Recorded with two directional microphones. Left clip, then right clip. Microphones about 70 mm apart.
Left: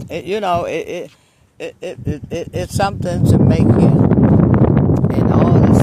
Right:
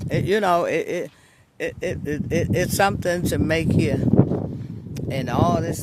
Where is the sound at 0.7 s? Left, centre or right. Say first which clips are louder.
Left 1 dB; centre.